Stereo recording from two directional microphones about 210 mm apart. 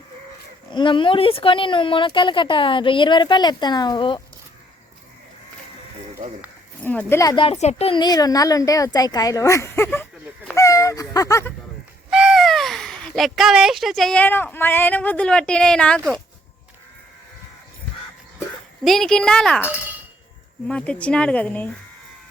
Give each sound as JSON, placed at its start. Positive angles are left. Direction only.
{"t": 0.7, "sound": "speech", "side_deg": 20}
{"t": 6.2, "sound": "speech", "side_deg": -35}
{"t": 6.8, "sound": "speech", "side_deg": 10}
{"t": 12.1, "sound": "speech", "side_deg": 0}
{"t": 18.9, "sound": "a woman's voice", "side_deg": 0}
{"t": 20.7, "sound": "a woman's voice", "side_deg": 5}